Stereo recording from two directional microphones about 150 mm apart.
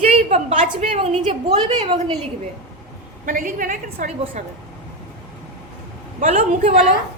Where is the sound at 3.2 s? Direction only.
60° right (ahead or behind).